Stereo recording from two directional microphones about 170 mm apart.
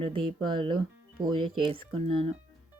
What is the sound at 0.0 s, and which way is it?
Speech, 30° right (ahead or behind).